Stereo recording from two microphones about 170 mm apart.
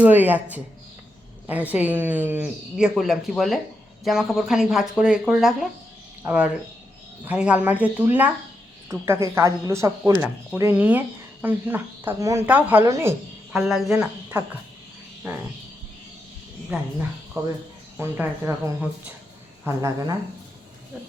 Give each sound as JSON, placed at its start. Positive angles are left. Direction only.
{"t": 0.0, "sound": "a woman's voice", "side_deg": -10}
{"t": 1.5, "sound": "a woman's voice", "side_deg": -10}
{"t": 13.5, "sound": "speech", "side_deg": -5}
{"t": 15.2, "sound": "a woman's voice", "side_deg": -15}
{"t": 16.7, "sound": "a woman's voice", "side_deg": -5}
{"t": 17.4, "sound": "a woman's voice", "side_deg": -20}